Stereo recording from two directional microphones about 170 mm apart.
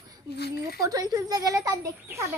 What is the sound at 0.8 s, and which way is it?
A child's voice, 20° right (ahead or behind).